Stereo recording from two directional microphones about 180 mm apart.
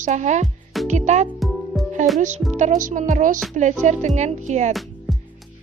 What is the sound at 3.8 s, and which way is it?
Music, 40° right (ahead or behind).